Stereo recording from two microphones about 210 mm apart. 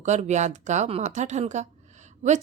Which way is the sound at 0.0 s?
35° right (ahead or behind).